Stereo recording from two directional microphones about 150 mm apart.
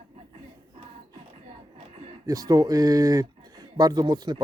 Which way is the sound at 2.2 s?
25° right (ahead or behind).